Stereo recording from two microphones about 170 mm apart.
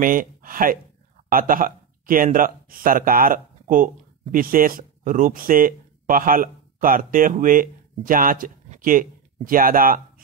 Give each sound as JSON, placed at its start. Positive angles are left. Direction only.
{"t": 0.0, "sound": "speech", "side_deg": -55}